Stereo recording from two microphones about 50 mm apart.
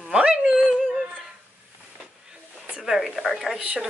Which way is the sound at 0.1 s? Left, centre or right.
Centre.